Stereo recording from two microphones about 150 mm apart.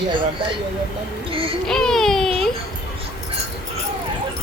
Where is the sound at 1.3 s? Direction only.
40° right (ahead or behind).